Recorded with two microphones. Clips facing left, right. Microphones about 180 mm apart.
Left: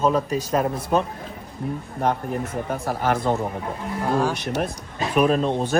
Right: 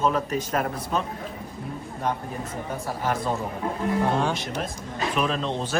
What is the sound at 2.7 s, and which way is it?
Speech, 65° left (ahead or behind).